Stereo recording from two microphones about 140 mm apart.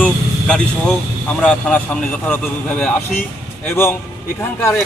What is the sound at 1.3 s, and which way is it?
A man's voice, 10° left (ahead or behind).